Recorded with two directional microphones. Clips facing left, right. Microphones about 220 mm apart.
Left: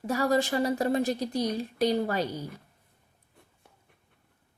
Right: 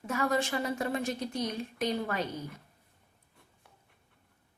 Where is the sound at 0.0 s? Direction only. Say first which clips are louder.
Left 4 dB; 35° left (ahead or behind).